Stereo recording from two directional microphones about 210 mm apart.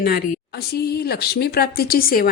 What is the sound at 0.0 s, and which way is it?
A woman's voice, 45° left (ahead or behind).